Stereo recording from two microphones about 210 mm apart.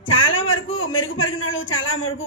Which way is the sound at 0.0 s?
65° left (ahead or behind).